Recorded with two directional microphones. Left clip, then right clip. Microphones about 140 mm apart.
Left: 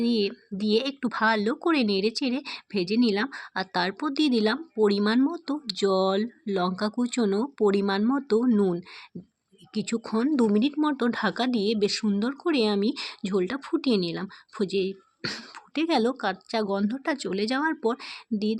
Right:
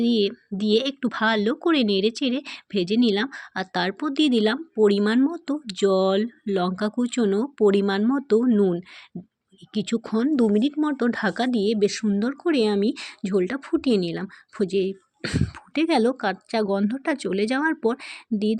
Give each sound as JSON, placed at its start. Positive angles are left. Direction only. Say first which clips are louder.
{"t": 0.0, "sound": "speech", "louder": "right 4 dB", "side_deg": -30}
{"t": 9.7, "sound": "speech", "louder": "right 3 dB", "side_deg": -30}
{"t": 15.7, "sound": "speech", "louder": "right 3 dB", "side_deg": -35}